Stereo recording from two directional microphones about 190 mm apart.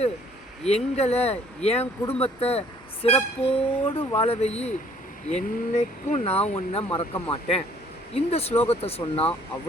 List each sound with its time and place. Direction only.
0.6 s speech: 35° left (ahead or behind)